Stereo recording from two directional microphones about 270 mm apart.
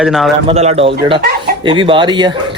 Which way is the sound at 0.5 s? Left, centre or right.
Right.